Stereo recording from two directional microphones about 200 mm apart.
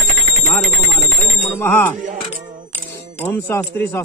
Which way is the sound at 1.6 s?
10° left (ahead or behind).